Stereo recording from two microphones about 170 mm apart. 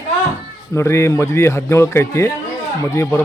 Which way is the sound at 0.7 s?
15° left (ahead or behind).